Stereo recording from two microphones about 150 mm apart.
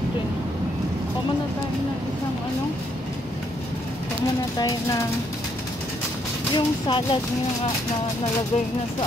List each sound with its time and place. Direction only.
4.6 s speech: 25° left (ahead or behind)
6.5 s speech: 30° left (ahead or behind)